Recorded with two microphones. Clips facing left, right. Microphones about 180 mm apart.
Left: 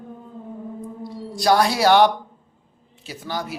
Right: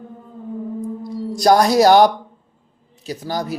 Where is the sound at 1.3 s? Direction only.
45° right (ahead or behind).